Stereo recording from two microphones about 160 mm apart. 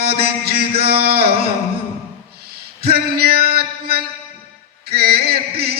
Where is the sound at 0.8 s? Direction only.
75° right (ahead or behind).